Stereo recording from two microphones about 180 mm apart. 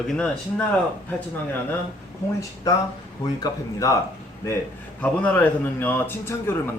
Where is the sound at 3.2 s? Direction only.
20° left (ahead or behind).